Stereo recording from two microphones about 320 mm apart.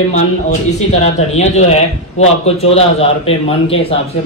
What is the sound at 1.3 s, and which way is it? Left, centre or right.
A man's voice, left.